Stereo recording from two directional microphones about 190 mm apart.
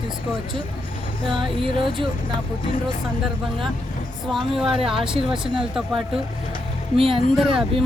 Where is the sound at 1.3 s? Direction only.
25° right (ahead or behind).